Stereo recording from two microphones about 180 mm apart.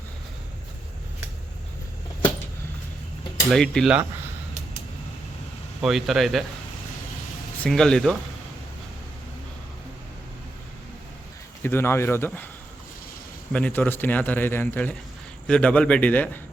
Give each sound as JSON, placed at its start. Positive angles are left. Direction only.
{"t": 3.5, "sound": "speech", "side_deg": 5}
{"t": 5.8, "sound": "speech", "side_deg": 0}
{"t": 7.6, "sound": "speech", "side_deg": 5}
{"t": 11.6, "sound": "a man's voice", "side_deg": 10}
{"t": 13.5, "sound": "a man's voice", "side_deg": 5}